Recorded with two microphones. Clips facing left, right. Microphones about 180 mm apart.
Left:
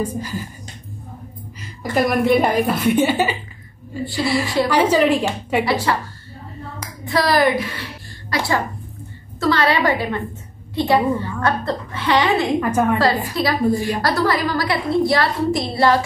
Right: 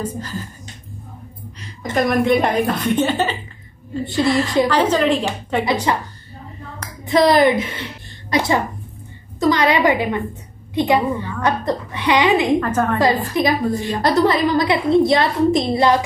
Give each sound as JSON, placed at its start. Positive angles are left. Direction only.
{"t": 0.0, "sound": "a woman's voice", "side_deg": 10}
{"t": 2.0, "sound": "a woman's voice", "side_deg": 5}
{"t": 5.7, "sound": "a woman's voice", "side_deg": -20}
{"t": 7.1, "sound": "a woman's voice", "side_deg": -20}
{"t": 12.5, "sound": "a woman's voice", "side_deg": 10}
{"t": 13.3, "sound": "a woman's voice", "side_deg": -20}